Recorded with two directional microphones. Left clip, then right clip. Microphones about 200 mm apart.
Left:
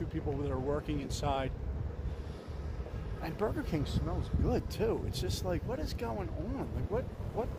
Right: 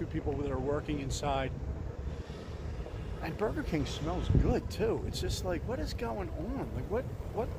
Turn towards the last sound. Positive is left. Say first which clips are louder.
# right 1 dB
turn(degrees=10)  # may be behind; listen again after turning